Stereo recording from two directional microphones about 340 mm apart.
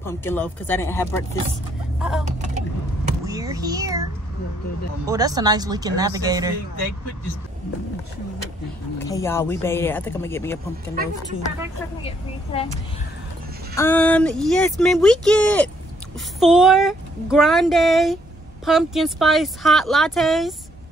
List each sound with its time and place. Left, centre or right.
0.0 s speech: centre
2.0 s vehicle: centre
3.1 s a sound: centre
5.0 s speech: centre
8.9 s speech: centre
12.5 s speech: centre
13.7 s speech: centre